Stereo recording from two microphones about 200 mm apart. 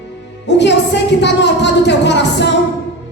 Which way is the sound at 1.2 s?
60° left (ahead or behind).